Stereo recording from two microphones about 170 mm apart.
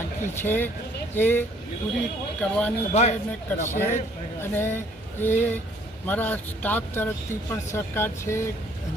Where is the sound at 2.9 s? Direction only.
40° left (ahead or behind).